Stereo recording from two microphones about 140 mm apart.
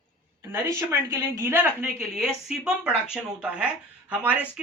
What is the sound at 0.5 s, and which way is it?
Speech, 20° right (ahead or behind).